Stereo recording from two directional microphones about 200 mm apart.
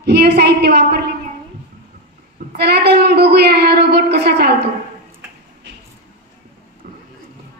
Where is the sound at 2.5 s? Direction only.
55° right (ahead or behind).